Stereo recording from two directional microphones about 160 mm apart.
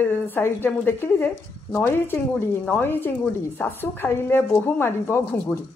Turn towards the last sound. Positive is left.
turn(degrees=15)  # may be behind; listen again after turning